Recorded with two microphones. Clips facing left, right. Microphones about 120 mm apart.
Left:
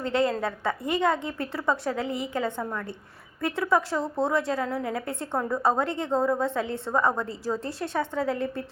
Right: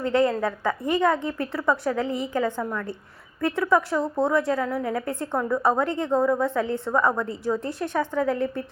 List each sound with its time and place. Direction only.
0.0 s a woman's voice: 25° left (ahead or behind)
2.0 s a woman's voice: 25° right (ahead or behind)
2.3 s a woman's voice: 25° left (ahead or behind)